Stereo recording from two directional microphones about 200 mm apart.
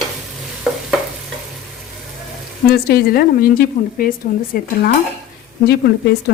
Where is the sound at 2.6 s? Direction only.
50° left (ahead or behind).